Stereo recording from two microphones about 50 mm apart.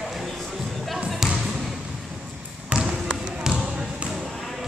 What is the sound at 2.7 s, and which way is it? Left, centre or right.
Basketball bounce, right.